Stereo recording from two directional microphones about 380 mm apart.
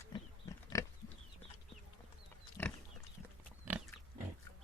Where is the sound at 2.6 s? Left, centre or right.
Centre.